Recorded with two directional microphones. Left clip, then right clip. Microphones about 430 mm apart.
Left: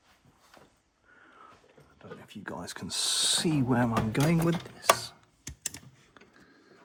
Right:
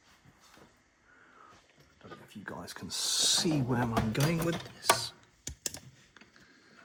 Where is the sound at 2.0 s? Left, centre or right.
Centre.